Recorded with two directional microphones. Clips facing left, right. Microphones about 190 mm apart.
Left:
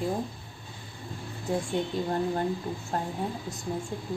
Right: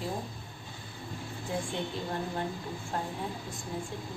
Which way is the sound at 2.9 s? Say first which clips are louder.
Left 3 dB; 45° left (ahead or behind).